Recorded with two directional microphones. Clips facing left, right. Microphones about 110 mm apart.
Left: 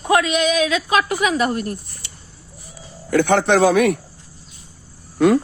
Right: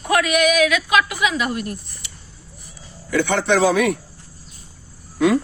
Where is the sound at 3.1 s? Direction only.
50° left (ahead or behind).